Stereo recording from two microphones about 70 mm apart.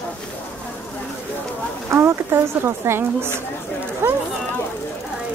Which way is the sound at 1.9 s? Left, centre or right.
Right.